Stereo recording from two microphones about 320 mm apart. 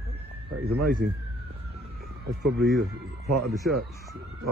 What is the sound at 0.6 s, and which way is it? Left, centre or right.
Speech, right.